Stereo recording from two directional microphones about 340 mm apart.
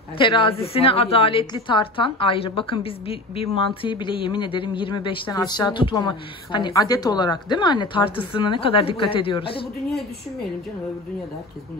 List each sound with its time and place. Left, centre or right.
0.2 s a woman's voice: centre